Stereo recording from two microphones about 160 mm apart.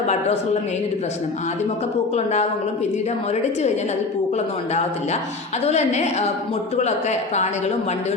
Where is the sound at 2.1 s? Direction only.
45° left (ahead or behind).